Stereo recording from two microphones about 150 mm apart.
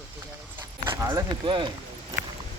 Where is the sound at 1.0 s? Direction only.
25° right (ahead or behind).